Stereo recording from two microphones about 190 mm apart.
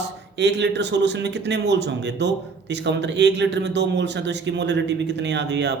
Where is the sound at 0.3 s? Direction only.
65° right (ahead or behind).